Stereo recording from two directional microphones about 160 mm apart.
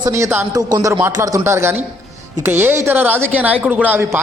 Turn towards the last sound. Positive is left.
turn(degrees=-10)  # may be behind; listen again after turning